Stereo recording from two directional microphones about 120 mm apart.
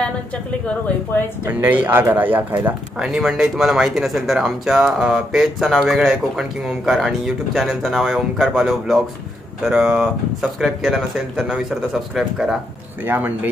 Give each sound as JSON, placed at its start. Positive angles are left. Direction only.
{"t": 0.0, "sound": "a woman's voice", "side_deg": 10}
{"t": 1.4, "sound": "speech", "side_deg": -15}
{"t": 3.0, "sound": "speech", "side_deg": -5}
{"t": 13.0, "sound": "speech", "side_deg": -15}